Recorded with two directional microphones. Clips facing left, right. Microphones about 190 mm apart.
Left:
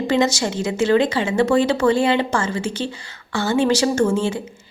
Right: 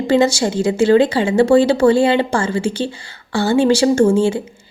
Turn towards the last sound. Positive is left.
turn(degrees=-30)  # may be behind; listen again after turning